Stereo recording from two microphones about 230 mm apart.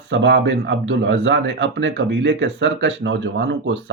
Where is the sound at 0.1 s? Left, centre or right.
Right.